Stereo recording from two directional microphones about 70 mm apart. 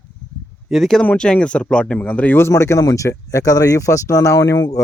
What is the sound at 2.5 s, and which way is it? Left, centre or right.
Speech, left.